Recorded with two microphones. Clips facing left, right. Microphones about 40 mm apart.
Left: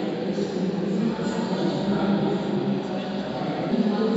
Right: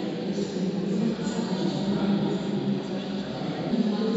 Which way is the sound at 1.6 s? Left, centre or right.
Centre.